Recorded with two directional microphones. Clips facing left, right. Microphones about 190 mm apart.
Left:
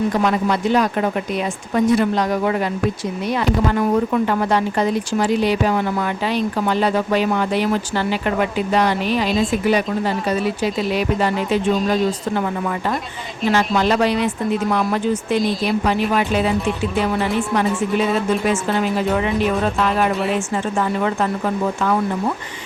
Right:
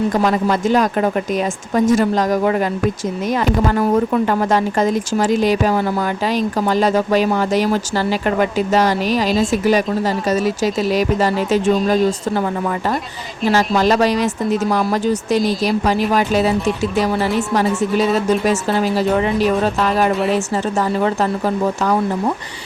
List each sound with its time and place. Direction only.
0.1 s a woman's voice: 40° right (ahead or behind)
13.4 s speech: 40° right (ahead or behind)